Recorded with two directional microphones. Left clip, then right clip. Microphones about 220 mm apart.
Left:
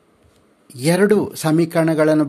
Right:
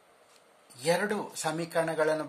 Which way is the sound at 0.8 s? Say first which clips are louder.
Left 13 dB; 40° left (ahead or behind).